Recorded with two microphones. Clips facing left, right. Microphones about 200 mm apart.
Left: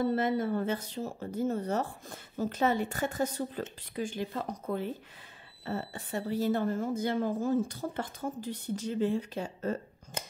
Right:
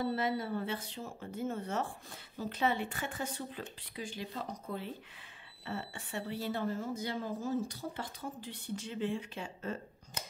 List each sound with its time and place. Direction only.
0.0 s a woman's voice: 50° left (ahead or behind)
5.7 s a woman's voice: 40° left (ahead or behind)